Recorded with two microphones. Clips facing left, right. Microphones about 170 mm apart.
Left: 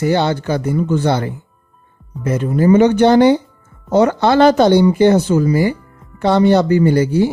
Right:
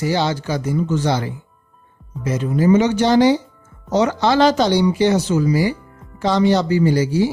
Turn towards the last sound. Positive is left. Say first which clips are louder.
# left 3 dB
turn(degrees=55)  # may be behind; listen again after turning